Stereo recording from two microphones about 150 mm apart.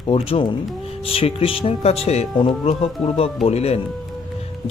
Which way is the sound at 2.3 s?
30° left (ahead or behind).